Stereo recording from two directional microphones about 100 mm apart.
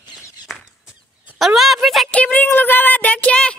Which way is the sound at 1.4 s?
Centre (ahead or behind).